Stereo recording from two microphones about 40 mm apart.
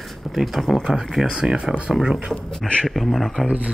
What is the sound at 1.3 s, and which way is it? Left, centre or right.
Speech, centre.